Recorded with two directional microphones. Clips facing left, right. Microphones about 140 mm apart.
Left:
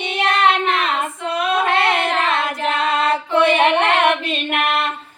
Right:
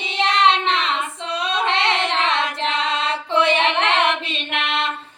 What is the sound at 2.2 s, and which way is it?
Carnatic music, 5° left (ahead or behind).